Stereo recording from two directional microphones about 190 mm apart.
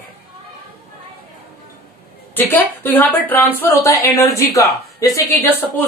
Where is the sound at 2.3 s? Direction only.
10° left (ahead or behind).